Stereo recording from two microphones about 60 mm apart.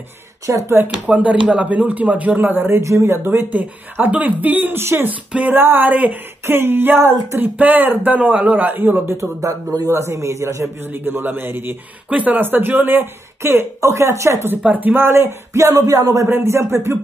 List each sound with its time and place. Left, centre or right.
0.7 s speech: right
1.0 s speech: right
6.4 s speech: right
9.8 s a man's voice: right
10.9 s speech: right
12.1 s speech: right
13.7 s a man's voice: right
14.6 s speech: right
15.5 s speech: right
16.3 s speech: right